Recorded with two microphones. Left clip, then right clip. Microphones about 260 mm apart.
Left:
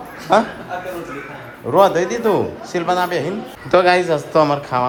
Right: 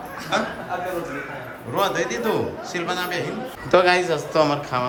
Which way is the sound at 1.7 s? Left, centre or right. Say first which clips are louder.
Left 9 dB; centre.